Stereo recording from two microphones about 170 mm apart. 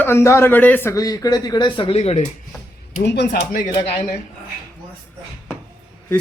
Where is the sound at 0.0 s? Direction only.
15° left (ahead or behind); by 2.3 s 40° left (ahead or behind).